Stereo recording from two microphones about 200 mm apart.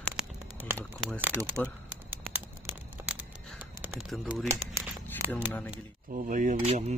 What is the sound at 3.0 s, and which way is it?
Caw, 15° right (ahead or behind).